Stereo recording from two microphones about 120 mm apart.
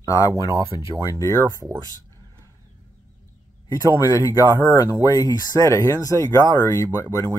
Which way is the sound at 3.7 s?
30° left (ahead or behind).